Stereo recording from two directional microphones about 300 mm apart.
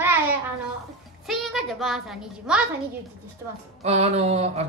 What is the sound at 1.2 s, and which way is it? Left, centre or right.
A child's voice, centre.